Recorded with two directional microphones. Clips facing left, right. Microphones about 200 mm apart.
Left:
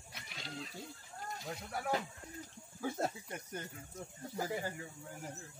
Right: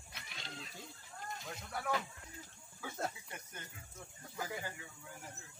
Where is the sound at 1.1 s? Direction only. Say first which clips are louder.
Left 2 dB; 35° left (ahead or behind).